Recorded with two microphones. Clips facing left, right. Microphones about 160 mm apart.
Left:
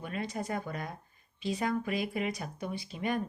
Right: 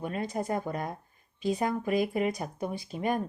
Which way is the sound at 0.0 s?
45° right (ahead or behind).